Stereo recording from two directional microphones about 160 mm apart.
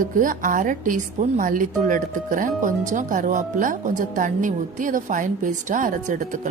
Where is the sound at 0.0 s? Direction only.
55° right (ahead or behind).